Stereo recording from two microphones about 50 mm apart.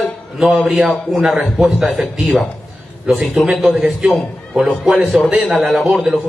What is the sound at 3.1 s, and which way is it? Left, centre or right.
A man's voice, centre.